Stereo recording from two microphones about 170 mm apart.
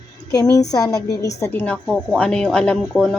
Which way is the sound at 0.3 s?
20° left (ahead or behind).